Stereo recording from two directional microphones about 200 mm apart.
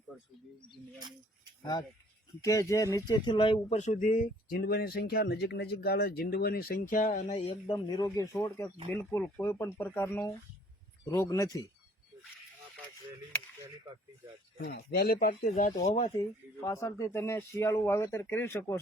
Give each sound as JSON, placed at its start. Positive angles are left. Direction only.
{"t": 0.1, "sound": "speech", "side_deg": 0}
{"t": 2.4, "sound": "speech", "side_deg": 15}
{"t": 14.6, "sound": "speech", "side_deg": 55}
{"t": 16.6, "sound": "speech", "side_deg": 15}